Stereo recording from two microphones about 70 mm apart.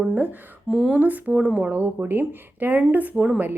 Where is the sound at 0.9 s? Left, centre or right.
Right.